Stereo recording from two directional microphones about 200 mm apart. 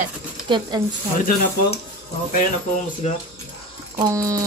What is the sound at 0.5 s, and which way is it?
Speech, 20° right (ahead or behind).